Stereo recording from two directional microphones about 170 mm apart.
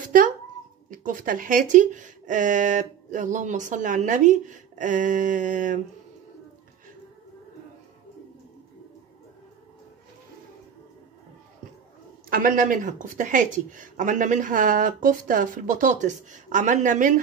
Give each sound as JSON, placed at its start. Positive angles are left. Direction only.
{"t": 0.8, "sound": "speech", "side_deg": -50}
{"t": 12.3, "sound": "speech", "side_deg": -55}